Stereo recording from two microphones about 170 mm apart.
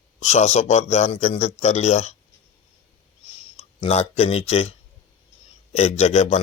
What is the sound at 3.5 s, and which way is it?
Speech, 40° left (ahead or behind).